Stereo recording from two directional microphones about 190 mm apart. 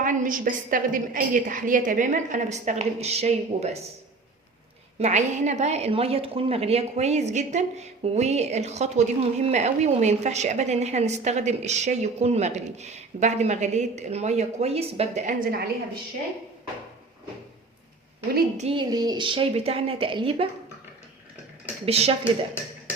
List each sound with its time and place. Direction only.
0.0 s a woman's voice: 45° right (ahead or behind)
4.9 s a woman's voice: 35° right (ahead or behind); by 15.7 s 50° right (ahead or behind)
18.5 s a woman's voice: 30° right (ahead or behind)
21.8 s a woman's voice: 30° right (ahead or behind)